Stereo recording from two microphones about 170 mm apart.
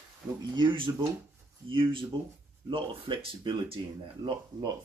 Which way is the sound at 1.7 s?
30° right (ahead or behind).